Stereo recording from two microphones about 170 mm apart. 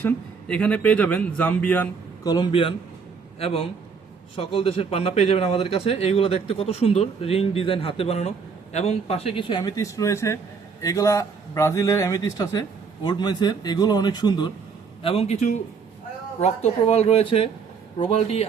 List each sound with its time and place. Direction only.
0.0 s a man's voice: 5° left (ahead or behind)
2.2 s a man's voice: 25° left (ahead or behind)
15.0 s a man's voice: 35° left (ahead or behind)